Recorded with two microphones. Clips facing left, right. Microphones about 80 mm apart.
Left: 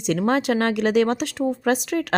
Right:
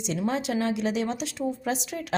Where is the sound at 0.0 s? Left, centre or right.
Left.